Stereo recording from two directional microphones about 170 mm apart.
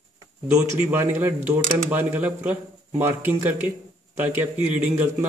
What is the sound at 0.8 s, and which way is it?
Speech, 10° right (ahead or behind).